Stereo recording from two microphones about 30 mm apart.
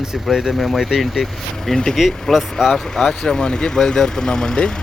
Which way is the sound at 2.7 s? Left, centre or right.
Centre.